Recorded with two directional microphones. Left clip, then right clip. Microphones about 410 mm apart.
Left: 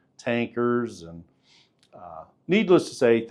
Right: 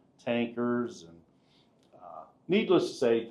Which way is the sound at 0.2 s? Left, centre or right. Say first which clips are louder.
Left 5 dB; left.